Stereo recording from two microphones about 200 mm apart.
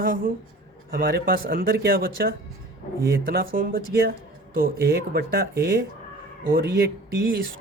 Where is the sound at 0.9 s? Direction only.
45° right (ahead or behind).